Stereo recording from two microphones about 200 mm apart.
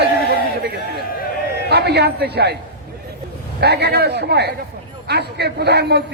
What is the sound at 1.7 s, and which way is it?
Speech, 55° right (ahead or behind).